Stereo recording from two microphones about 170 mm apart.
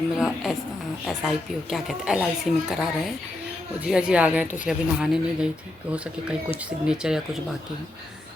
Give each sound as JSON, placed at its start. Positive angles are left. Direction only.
{"t": 0.2, "sound": "speech", "side_deg": 0}
{"t": 6.7, "sound": "speech", "side_deg": -5}